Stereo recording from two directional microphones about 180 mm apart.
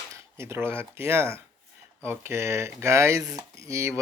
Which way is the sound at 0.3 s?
15° right (ahead or behind).